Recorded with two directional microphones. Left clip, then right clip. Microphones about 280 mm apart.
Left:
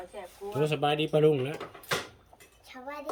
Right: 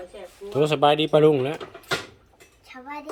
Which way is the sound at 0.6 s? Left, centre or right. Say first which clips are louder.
Right 9 dB; centre.